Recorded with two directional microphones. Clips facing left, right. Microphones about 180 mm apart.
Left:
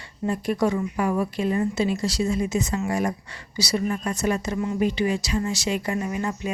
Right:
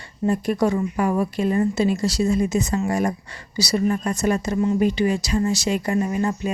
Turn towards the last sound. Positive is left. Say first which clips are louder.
# right 5 dB
turn(degrees=-40)  # may be behind; listen again after turning